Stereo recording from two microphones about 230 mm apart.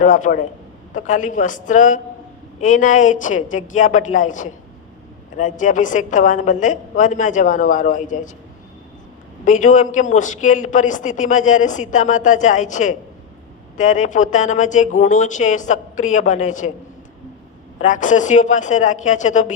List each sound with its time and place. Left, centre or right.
0.0 s a woman's voice: left
9.4 s a woman's voice: left
17.7 s a woman's voice: left